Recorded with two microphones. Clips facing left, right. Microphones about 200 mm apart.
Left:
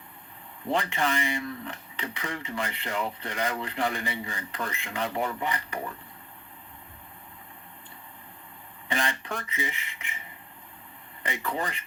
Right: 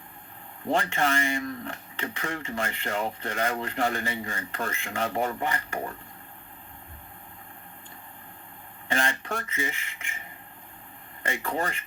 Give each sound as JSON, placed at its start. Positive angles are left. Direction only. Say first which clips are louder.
{"t": 0.7, "sound": "speech", "louder": "right 2 dB", "side_deg": -45}
{"t": 8.9, "sound": "speech", "louder": "right 2 dB", "side_deg": -50}
{"t": 11.2, "sound": "speech", "louder": "right 2 dB", "side_deg": -45}